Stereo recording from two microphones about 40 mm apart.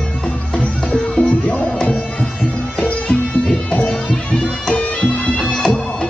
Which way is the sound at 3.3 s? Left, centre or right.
Left.